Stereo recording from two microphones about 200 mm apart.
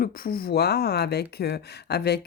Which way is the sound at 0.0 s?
45° left (ahead or behind).